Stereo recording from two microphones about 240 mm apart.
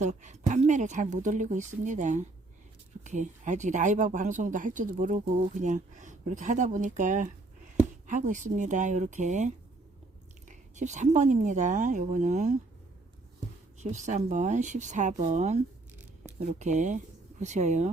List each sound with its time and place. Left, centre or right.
0.0 s speech: right
10.5 s speech: right
13.7 s speech: right